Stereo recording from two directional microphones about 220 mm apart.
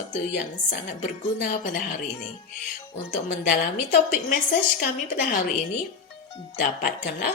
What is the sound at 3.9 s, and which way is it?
Speech, 35° left (ahead or behind).